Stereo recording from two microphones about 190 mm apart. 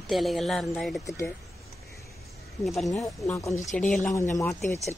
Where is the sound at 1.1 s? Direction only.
15° left (ahead or behind).